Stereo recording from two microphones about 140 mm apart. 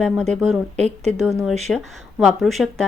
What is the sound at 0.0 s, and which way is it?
Speech, 5° left (ahead or behind).